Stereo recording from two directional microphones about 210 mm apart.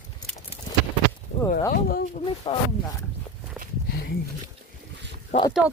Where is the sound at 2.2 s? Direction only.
25° left (ahead or behind).